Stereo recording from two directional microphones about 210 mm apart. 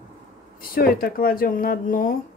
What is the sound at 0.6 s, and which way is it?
Speech, 45° left (ahead or behind).